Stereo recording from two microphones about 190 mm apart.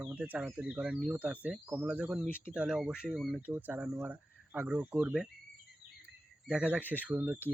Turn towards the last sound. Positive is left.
turn(degrees=-10)  # may be behind; listen again after turning